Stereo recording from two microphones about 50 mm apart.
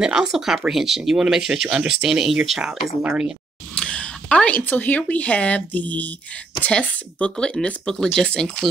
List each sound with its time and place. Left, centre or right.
0.0 s speech: centre
3.7 s a sound: centre
4.6 s speech: left
6.7 s speech: left